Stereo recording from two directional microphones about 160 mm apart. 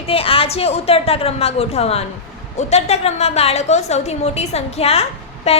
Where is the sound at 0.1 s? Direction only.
35° left (ahead or behind).